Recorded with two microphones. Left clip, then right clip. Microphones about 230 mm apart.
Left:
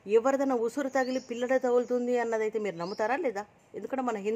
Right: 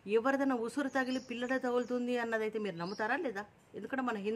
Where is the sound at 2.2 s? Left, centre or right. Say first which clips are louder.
Left 6 dB; centre.